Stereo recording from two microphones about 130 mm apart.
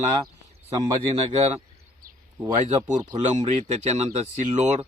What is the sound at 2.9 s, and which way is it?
Speech, 65° right (ahead or behind).